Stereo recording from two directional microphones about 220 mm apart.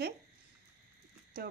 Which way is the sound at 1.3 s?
45° right (ahead or behind).